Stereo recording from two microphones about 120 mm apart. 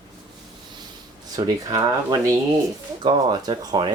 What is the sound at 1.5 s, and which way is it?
Speech, 35° right (ahead or behind).